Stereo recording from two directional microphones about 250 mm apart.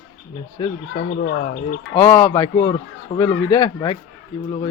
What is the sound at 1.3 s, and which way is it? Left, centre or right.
Speech, left.